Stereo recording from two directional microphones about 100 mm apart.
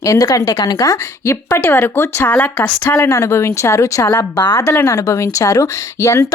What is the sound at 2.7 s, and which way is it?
A woman's voice, 30° left (ahead or behind).